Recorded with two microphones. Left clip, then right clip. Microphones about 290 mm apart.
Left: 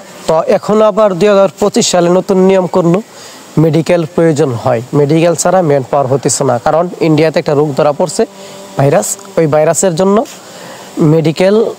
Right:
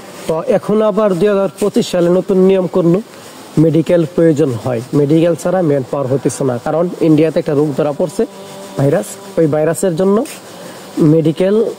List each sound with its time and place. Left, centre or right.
0.3 s speech: left